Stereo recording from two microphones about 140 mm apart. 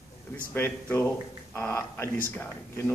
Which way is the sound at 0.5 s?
15° left (ahead or behind).